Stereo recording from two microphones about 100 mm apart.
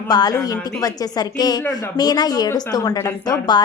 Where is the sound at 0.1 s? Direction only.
40° left (ahead or behind).